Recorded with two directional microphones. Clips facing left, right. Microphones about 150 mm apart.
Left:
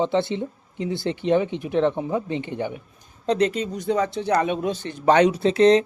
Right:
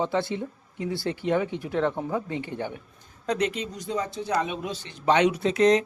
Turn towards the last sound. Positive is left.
turn(degrees=30)  # may be behind; listen again after turning